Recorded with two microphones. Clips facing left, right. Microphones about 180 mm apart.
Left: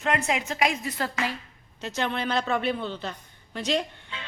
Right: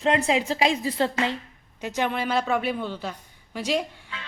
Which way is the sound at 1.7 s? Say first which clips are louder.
Right 3 dB; 10° right (ahead or behind).